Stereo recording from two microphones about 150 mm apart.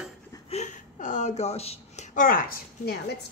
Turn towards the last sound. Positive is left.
turn(degrees=90)